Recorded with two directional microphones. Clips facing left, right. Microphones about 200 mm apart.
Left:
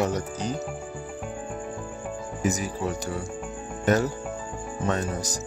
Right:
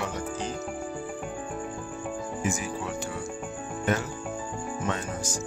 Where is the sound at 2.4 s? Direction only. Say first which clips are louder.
Left 6 dB; 40° left (ahead or behind).